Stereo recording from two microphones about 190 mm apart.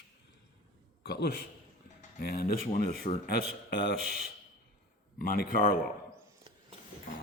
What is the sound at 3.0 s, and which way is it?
Speech, 35° left (ahead or behind).